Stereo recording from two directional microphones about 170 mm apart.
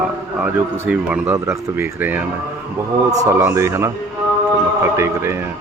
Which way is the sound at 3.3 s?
15° right (ahead or behind).